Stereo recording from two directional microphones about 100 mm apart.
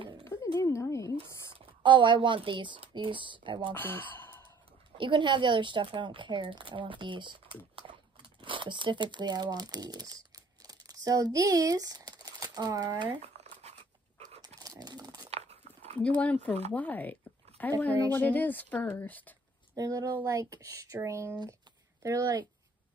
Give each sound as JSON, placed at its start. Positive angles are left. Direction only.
{"t": 0.2, "sound": "a sound", "side_deg": 30}
{"t": 1.8, "sound": "speech", "side_deg": -55}
{"t": 3.7, "sound": "speech", "side_deg": 20}
{"t": 4.9, "sound": "speech", "side_deg": -55}
{"t": 13.2, "sound": "crumpling", "side_deg": -90}
{"t": 14.4, "sound": "a sound", "side_deg": -40}
{"t": 15.2, "sound": "dog", "side_deg": -90}
{"t": 16.0, "sound": "speech", "side_deg": 15}
{"t": 19.7, "sound": "speech", "side_deg": -35}